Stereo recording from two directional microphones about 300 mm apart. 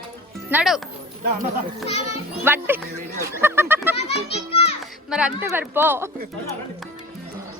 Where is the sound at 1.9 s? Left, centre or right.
Left.